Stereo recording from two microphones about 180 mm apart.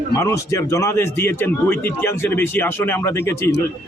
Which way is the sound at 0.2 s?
15° left (ahead or behind).